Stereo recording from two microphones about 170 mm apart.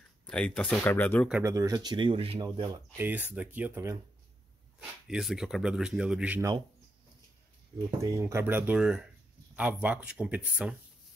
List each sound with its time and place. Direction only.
0.3 s speech: 5° left (ahead or behind)
1.4 s speech: 20° right (ahead or behind)
3.0 s speech: 10° right (ahead or behind)
4.7 s speech: 5° right (ahead or behind)
8.0 s speech: 15° right (ahead or behind)